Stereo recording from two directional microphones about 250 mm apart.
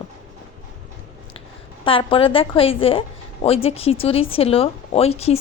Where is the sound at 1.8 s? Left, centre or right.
Left.